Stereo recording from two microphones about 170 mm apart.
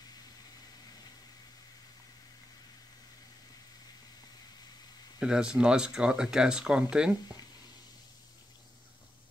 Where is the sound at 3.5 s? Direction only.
25° left (ahead or behind).